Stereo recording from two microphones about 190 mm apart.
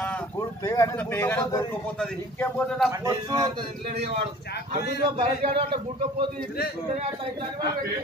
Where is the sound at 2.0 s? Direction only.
5° left (ahead or behind).